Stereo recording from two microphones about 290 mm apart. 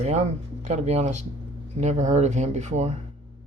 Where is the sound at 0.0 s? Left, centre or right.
Right.